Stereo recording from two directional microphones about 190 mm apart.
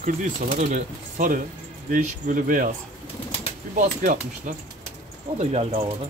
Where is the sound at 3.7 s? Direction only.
40° right (ahead or behind).